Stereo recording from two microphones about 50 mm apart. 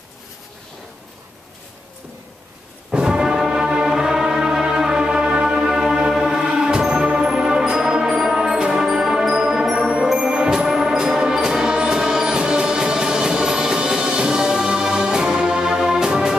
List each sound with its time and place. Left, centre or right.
2.9 s music: centre
10.1 s orchestra: centre